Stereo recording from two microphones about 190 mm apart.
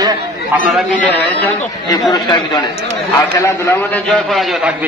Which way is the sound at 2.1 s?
20° left (ahead or behind).